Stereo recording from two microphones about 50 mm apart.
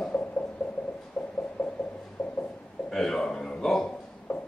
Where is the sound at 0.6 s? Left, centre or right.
Left.